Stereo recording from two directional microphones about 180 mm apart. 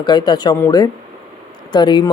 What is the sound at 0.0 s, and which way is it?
Speech, 25° left (ahead or behind).